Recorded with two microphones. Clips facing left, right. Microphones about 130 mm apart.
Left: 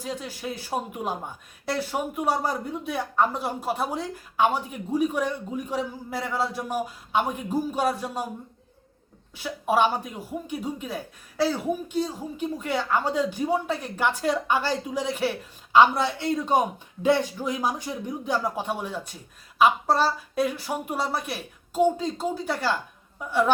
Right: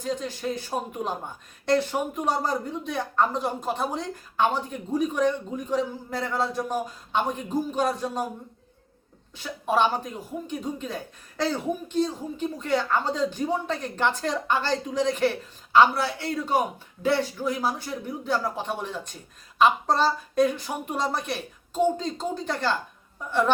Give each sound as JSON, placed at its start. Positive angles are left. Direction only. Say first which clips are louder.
{"t": 0.0, "sound": "a man's voice", "louder": "right 3 dB", "side_deg": 10}
{"t": 9.3, "sound": "a man's voice", "louder": "left 1 dB", "side_deg": 10}